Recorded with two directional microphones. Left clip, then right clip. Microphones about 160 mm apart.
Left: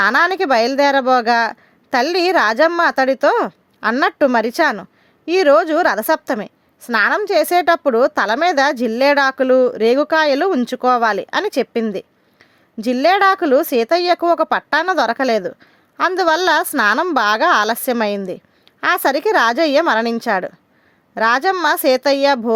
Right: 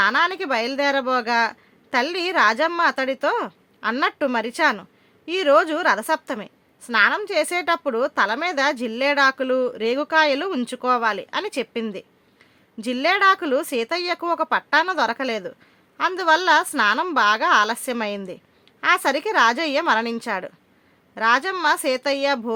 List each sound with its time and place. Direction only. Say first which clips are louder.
0.0 s a woman's voice: left 5 dB; 50° left (ahead or behind)